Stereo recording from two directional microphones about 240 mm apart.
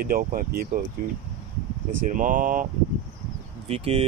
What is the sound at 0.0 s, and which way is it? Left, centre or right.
Speech, right.